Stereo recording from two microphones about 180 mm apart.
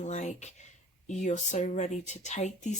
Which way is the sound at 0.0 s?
40° left (ahead or behind).